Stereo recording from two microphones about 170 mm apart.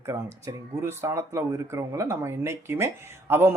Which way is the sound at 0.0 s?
15° right (ahead or behind).